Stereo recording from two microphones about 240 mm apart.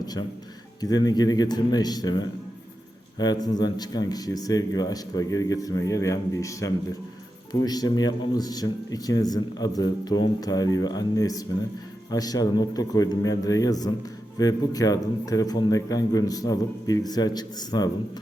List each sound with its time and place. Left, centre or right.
0.0 s a man's voice: centre